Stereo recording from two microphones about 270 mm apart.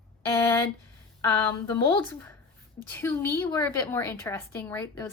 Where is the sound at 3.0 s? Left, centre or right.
Centre.